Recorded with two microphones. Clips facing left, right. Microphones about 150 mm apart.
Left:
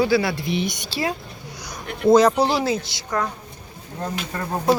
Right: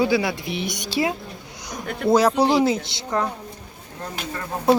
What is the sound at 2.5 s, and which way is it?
Speech, 20° right (ahead or behind).